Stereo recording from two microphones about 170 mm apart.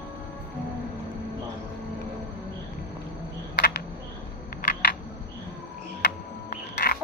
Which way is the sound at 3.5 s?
75° left (ahead or behind).